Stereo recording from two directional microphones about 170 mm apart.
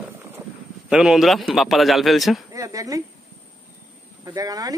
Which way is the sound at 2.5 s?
20° right (ahead or behind).